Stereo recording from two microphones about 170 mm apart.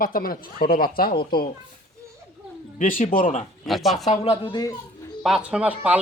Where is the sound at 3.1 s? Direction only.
50° left (ahead or behind).